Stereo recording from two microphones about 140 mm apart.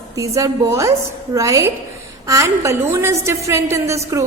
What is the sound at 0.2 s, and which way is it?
A woman's voice, 25° right (ahead or behind).